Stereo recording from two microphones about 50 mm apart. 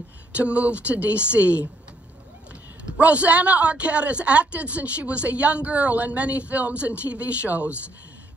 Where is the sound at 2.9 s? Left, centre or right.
Right.